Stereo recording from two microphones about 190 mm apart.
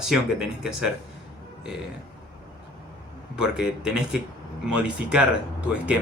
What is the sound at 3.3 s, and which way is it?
Speech, 5° right (ahead or behind).